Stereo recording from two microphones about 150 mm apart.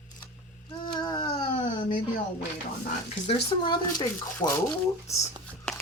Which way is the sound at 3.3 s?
30° left (ahead or behind).